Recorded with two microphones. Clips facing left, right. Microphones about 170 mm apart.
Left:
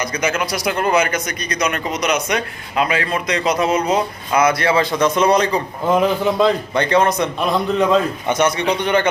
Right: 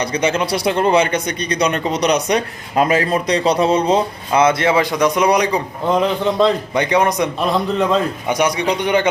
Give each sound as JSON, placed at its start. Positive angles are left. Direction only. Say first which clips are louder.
{"t": 0.0, "sound": "speech", "louder": "right 3 dB", "side_deg": -30}
{"t": 5.8, "sound": "a man's voice", "louder": "left 1 dB", "side_deg": 5}
{"t": 6.7, "sound": "a man's voice", "louder": "even", "side_deg": -15}
{"t": 7.4, "sound": "a man's voice", "louder": "left 1 dB", "side_deg": 0}
{"t": 8.3, "sound": "a man's voice", "louder": "even", "side_deg": -15}